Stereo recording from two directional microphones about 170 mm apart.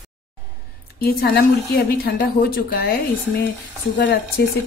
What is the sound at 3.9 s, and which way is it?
Speech, 75° left (ahead or behind).